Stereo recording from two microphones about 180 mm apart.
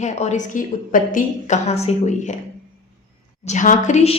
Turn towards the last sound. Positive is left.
turn(degrees=35)  # may be behind; listen again after turning